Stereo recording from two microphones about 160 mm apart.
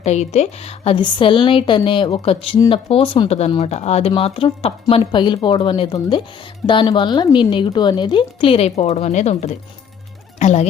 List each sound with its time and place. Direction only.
0.0 s speech: 45° left (ahead or behind)